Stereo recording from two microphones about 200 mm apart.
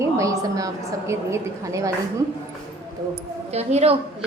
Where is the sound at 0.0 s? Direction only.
15° right (ahead or behind).